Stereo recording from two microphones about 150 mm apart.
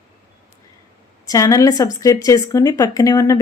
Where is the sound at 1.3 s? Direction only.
20° left (ahead or behind).